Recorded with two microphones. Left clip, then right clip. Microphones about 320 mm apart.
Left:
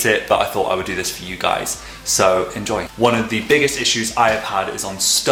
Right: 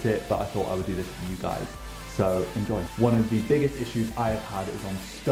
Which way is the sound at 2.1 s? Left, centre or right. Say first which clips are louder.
Left 10 dB; centre.